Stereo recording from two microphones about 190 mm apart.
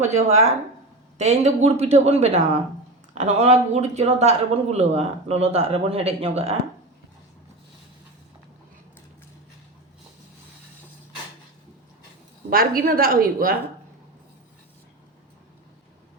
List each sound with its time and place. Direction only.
0.0 s speech: 35° right (ahead or behind)
12.5 s a woman's voice: 50° right (ahead or behind)